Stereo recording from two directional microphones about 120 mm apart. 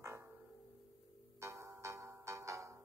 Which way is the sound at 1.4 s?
25° right (ahead or behind).